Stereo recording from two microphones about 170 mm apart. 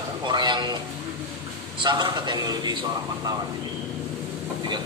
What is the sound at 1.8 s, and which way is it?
A man's voice, 25° right (ahead or behind).